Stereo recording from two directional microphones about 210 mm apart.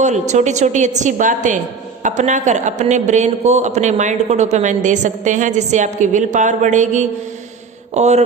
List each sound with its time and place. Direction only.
0.0 s a man's voice: 35° right (ahead or behind)